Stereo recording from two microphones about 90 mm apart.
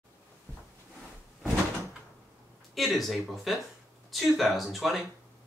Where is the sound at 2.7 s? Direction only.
Centre (ahead or behind).